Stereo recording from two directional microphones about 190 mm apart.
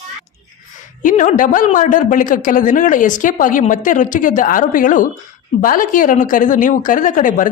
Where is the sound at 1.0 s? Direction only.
40° left (ahead or behind).